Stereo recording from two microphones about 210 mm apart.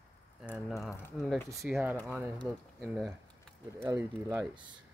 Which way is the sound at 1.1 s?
Centre (ahead or behind).